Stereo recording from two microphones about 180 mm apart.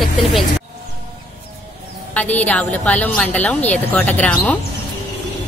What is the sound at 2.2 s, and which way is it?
A woman's voice, 10° left (ahead or behind).